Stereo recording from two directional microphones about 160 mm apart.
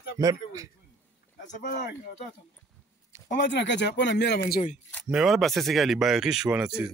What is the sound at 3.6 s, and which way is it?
Speech, 90° left.